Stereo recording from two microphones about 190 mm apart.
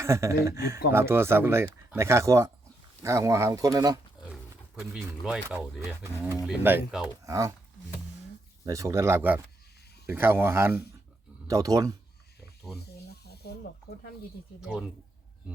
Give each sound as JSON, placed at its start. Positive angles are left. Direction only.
{"t": 0.0, "sound": "speech", "side_deg": -15}
{"t": 4.3, "sound": "speech", "side_deg": -5}
{"t": 13.1, "sound": "snake", "side_deg": 55}
{"t": 14.6, "sound": "speech", "side_deg": -5}